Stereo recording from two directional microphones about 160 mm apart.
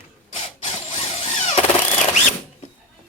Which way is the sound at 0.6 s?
35° left (ahead or behind).